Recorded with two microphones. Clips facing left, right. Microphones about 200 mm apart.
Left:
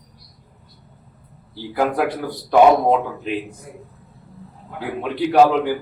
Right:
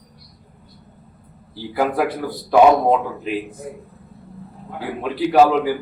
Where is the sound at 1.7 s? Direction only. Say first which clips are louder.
Even; centre (ahead or behind).